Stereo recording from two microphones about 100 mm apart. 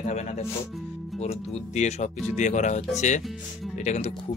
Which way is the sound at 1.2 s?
90° left.